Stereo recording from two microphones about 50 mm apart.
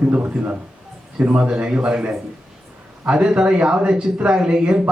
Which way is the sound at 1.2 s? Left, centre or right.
Right.